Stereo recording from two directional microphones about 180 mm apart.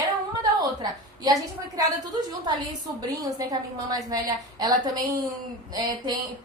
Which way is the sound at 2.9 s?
20° right (ahead or behind).